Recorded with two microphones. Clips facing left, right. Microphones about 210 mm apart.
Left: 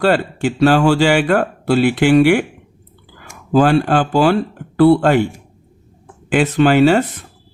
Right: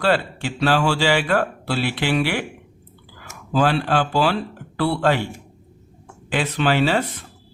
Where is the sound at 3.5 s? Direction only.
50° left (ahead or behind).